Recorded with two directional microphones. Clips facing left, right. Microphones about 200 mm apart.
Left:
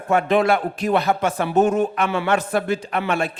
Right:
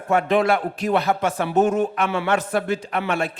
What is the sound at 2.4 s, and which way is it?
Speech, 20° left (ahead or behind).